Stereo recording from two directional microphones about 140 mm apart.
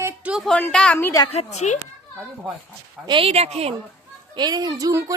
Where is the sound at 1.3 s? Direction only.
50° left (ahead or behind).